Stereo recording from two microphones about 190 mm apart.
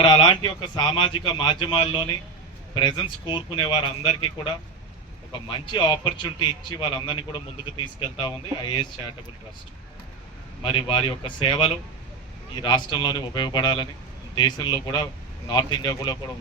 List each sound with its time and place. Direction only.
0.0 s a man's voice: 20° left (ahead or behind)
10.6 s a man's voice: 30° left (ahead or behind)